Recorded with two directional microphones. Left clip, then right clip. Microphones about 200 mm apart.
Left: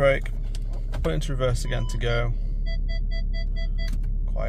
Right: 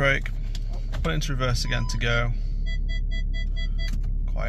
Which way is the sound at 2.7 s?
60° right (ahead or behind).